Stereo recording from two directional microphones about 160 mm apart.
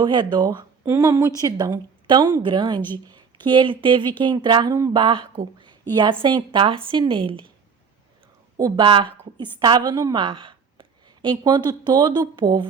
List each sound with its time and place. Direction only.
0.0 s a woman's voice: 30° right (ahead or behind)
8.5 s a woman's voice: 25° right (ahead or behind)